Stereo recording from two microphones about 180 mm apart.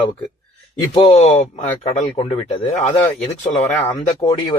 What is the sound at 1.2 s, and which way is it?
Speech, 35° left (ahead or behind).